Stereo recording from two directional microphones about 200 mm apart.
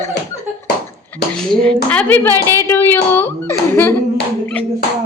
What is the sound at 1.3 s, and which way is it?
A woman's voice, 5° left (ahead or behind).